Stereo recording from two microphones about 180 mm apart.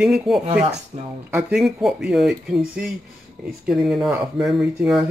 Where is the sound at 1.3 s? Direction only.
5° right (ahead or behind).